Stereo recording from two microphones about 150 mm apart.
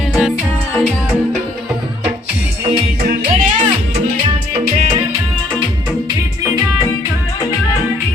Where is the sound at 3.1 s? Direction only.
85° right.